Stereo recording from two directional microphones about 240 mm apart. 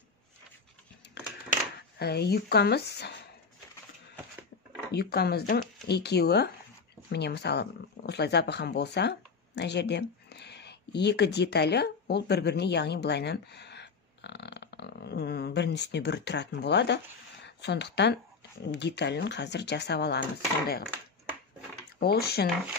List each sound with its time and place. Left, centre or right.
1.8 s speech: left
4.9 s speech: left
20.8 s a sound: centre
22.0 s speech: left